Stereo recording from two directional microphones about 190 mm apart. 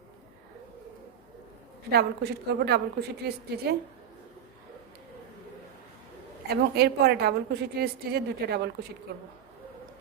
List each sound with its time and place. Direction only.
1.9 s a woman's voice: 60° right (ahead or behind)
6.5 s a woman's voice: 55° right (ahead or behind)